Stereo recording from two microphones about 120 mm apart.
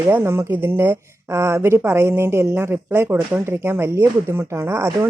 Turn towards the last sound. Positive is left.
turn(degrees=-25)  # may be behind; listen again after turning